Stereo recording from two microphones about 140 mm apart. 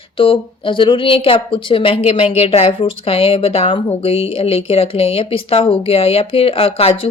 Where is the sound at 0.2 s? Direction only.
35° left (ahead or behind).